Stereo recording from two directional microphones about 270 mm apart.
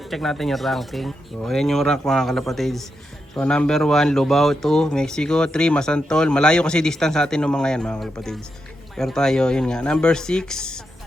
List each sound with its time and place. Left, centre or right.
0.0 s speech: centre